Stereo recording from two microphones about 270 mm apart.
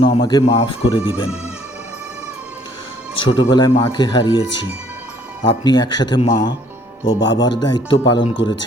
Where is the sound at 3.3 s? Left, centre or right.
Centre.